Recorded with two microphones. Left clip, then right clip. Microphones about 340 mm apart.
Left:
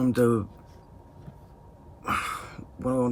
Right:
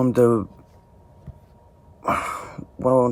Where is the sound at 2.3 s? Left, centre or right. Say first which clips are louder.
Right 5 dB; right.